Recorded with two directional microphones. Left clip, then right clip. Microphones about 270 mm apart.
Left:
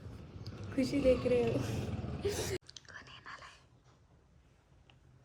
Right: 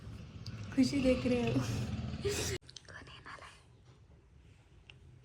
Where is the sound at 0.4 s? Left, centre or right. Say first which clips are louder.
Right 3 dB; centre.